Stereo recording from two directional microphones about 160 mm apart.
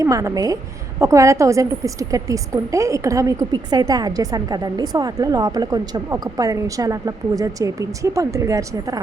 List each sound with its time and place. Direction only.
0.0 s a woman's voice: 20° right (ahead or behind)